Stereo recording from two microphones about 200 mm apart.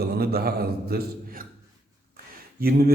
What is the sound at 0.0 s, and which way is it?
A man's voice, 50° right (ahead or behind).